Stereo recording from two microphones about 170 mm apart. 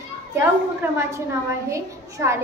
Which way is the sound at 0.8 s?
15° right (ahead or behind).